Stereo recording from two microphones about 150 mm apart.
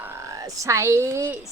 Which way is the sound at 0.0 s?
20° right (ahead or behind).